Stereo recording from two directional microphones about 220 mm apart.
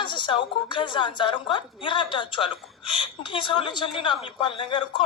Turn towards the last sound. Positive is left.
turn(degrees=20)  # may be behind; listen again after turning